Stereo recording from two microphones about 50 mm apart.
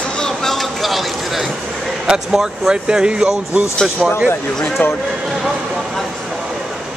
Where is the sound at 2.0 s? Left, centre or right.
Centre.